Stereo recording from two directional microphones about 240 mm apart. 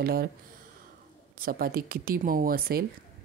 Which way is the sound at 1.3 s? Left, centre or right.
Right.